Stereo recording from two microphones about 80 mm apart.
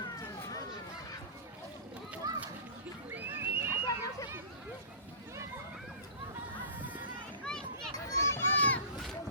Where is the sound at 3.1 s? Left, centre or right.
Right.